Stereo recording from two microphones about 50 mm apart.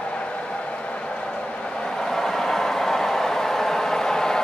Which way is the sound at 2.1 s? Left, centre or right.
Centre.